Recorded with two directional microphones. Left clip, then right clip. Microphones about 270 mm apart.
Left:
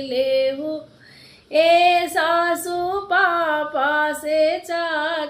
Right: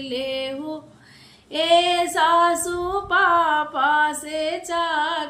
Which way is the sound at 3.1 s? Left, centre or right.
Centre.